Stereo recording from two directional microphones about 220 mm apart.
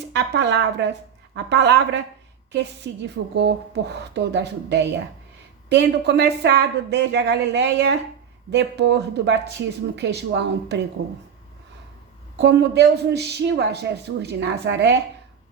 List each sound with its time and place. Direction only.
0.1 s speech: 50° right (ahead or behind)
12.4 s speech: 50° right (ahead or behind)